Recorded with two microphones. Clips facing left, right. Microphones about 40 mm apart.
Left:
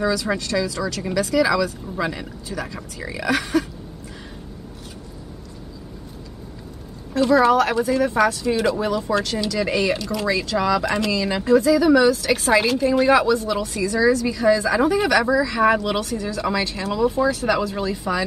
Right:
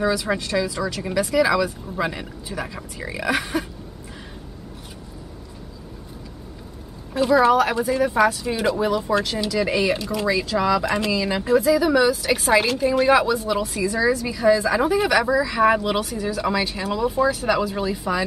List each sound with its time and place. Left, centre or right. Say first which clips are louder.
0.0 s speech: even; centre
7.2 s speech: left 1 dB; centre